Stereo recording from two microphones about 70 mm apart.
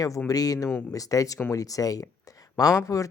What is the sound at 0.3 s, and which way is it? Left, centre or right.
Speech, left.